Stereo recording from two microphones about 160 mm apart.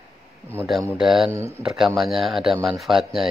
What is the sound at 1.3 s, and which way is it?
Speech, 15° right (ahead or behind).